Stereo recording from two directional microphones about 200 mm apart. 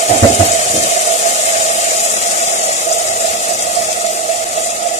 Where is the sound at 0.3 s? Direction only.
30° right (ahead or behind).